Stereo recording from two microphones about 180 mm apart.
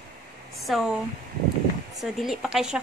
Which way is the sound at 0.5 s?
Centre (ahead or behind).